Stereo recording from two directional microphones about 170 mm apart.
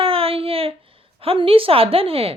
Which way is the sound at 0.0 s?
35° right (ahead or behind).